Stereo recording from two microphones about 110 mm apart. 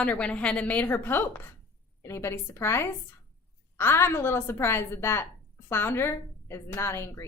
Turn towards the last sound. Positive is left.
turn(degrees=25)  # may be behind; listen again after turning